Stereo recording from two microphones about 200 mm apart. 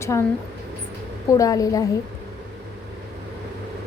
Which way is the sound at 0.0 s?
15° left (ahead or behind).